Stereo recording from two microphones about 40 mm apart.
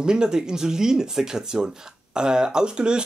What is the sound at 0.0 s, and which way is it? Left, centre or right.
Speech, centre.